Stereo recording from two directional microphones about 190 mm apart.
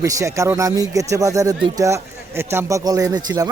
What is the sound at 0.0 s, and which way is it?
A man's voice, 15° right (ahead or behind).